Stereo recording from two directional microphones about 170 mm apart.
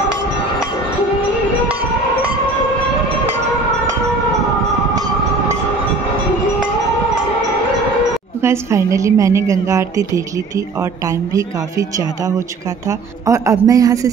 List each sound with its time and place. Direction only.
8.4 s a woman's voice: 15° right (ahead or behind)